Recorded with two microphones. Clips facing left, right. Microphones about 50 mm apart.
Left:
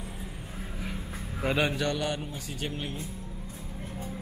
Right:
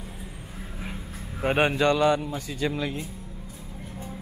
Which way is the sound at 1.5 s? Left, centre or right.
Right.